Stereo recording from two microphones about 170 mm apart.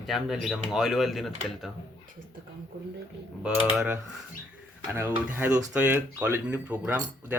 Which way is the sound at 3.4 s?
5° right (ahead or behind).